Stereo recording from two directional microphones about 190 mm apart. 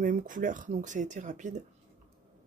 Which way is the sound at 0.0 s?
45° right (ahead or behind).